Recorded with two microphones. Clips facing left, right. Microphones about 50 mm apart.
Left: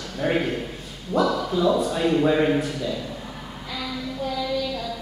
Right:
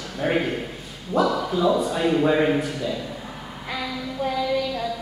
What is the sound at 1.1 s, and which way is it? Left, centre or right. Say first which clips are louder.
Speech: even; centre.